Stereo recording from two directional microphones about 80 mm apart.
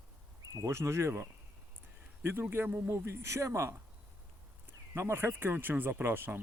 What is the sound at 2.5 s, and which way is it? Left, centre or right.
Speech, right.